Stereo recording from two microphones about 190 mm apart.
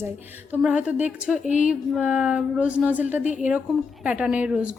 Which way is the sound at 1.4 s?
40° left (ahead or behind).